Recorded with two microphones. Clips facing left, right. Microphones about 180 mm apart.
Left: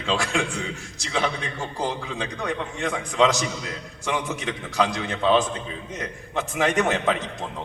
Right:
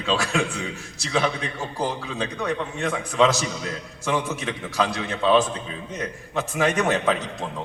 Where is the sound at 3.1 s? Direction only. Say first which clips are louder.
Right 1 dB; 15° left (ahead or behind).